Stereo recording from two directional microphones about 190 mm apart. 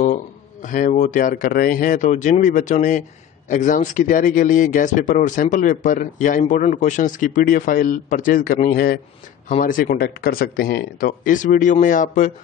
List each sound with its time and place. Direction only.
0.0 s speech: 40° left (ahead or behind)